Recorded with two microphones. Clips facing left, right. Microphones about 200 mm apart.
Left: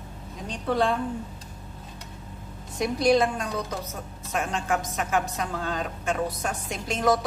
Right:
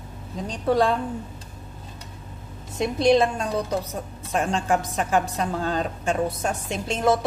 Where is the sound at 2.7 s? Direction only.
25° right (ahead or behind).